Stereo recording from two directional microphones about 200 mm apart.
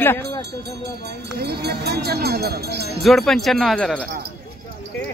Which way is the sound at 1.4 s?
55° right (ahead or behind).